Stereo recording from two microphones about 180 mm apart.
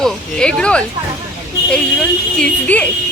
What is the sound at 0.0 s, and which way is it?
Speech, 5° left (ahead or behind).